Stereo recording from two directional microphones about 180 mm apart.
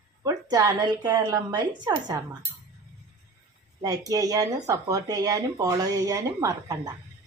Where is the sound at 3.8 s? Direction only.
20° right (ahead or behind).